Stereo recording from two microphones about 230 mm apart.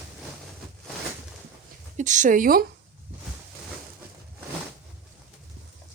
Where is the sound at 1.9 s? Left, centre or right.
Right.